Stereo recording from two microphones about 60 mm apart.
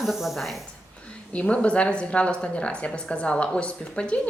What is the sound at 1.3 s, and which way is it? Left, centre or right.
A woman's voice, left.